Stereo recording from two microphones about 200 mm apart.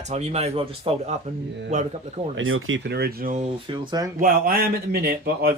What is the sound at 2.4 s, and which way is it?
Speech, 85° right.